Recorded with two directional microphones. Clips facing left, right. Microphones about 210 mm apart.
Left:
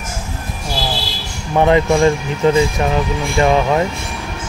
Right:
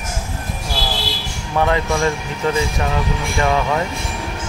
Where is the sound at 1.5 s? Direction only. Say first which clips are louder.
Left 6 dB; 20° left (ahead or behind).